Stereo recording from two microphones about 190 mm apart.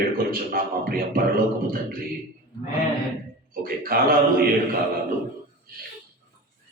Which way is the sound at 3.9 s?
50° right (ahead or behind).